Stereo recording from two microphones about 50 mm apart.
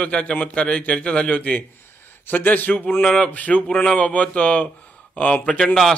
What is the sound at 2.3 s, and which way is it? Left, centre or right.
Speech, left.